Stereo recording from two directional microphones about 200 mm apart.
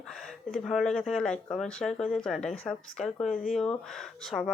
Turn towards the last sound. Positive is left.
turn(degrees=0)  # may be behind; listen again after turning